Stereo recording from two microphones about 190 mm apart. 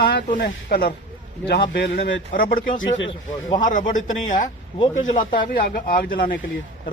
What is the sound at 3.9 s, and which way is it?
A man's voice, 40° left (ahead or behind).